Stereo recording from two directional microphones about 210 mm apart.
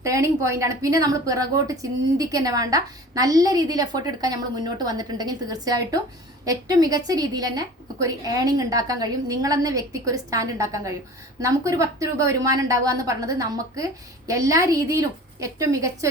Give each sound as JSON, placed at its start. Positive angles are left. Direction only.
{"t": 0.0, "sound": "a woman's voice", "side_deg": -15}